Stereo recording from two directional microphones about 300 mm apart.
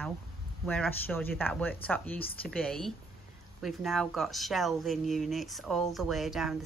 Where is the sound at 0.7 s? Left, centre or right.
Centre.